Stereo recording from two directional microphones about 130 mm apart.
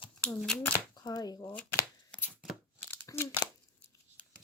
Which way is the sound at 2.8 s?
20° left (ahead or behind).